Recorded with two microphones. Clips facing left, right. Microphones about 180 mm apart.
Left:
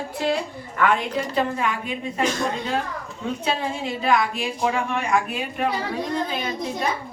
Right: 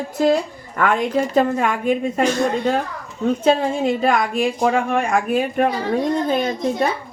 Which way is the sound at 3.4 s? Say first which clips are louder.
Right 9 dB; 45° right (ahead or behind).